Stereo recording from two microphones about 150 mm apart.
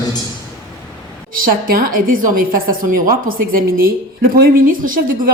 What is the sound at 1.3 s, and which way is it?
A woman's voice, 75° right (ahead or behind).